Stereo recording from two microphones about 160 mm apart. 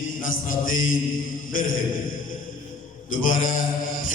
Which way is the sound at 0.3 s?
60° left (ahead or behind).